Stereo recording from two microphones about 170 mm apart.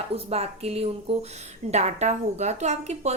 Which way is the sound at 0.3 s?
35° right (ahead or behind).